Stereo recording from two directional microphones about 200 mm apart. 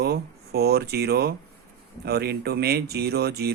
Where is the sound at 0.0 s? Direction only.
55° right (ahead or behind).